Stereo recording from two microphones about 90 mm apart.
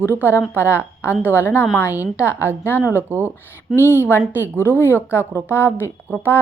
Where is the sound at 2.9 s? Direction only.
25° right (ahead or behind).